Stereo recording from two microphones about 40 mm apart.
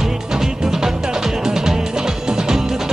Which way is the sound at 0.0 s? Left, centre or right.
Centre.